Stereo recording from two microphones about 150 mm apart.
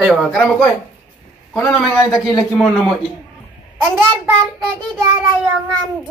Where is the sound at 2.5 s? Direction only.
Centre (ahead or behind).